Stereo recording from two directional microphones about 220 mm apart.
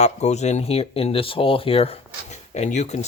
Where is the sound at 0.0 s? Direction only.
30° left (ahead or behind).